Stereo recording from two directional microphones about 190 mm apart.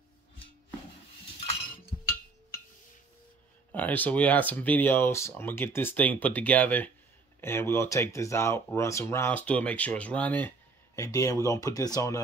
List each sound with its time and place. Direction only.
3.7 s speech: 10° left (ahead or behind)